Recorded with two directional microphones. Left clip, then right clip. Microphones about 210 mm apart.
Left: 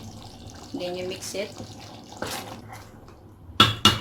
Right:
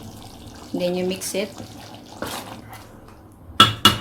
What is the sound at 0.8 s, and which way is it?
Speech, 40° right (ahead or behind).